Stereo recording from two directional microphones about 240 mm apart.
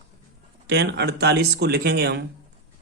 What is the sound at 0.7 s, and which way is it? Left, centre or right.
Speech, right.